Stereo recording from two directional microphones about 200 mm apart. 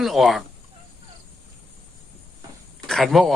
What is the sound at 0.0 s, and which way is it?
Speech, centre (ahead or behind).